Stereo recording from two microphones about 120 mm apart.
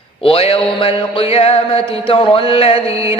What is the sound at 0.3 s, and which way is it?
Music, 50° left (ahead or behind).